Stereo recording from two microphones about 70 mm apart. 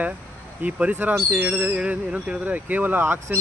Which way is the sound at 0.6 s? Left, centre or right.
Right.